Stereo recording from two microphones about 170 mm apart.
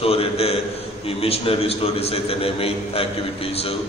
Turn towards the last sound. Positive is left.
turn(degrees=35)  # may be behind; listen again after turning